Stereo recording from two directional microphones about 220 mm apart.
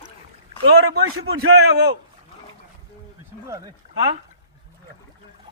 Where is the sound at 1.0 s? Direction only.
70° right (ahead or behind).